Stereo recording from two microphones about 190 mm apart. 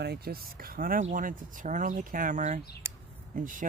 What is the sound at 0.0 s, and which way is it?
Speech, 55° right (ahead or behind).